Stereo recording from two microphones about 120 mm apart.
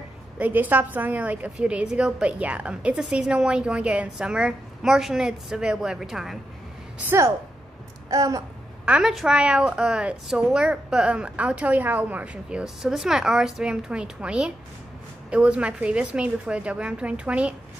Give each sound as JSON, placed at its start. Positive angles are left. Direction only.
{"t": 0.4, "sound": "a woman's voice", "side_deg": -15}
{"t": 7.0, "sound": "a woman's voice", "side_deg": -20}
{"t": 8.8, "sound": "a woman's voice", "side_deg": -5}